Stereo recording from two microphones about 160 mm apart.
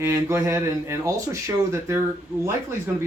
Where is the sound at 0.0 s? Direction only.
20° right (ahead or behind).